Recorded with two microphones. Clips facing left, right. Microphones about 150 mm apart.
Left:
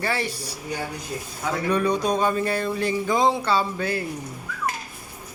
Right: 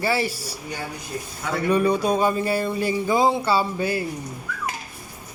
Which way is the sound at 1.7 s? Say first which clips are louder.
Right 3 dB; 5° right (ahead or behind).